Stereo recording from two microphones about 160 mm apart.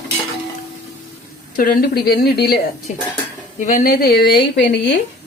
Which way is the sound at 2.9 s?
55° left (ahead or behind).